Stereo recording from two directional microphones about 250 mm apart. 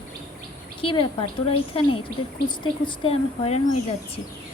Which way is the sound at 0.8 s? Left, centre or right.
Centre.